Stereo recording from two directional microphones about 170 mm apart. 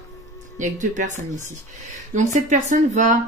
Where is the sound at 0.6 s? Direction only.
50° right (ahead or behind).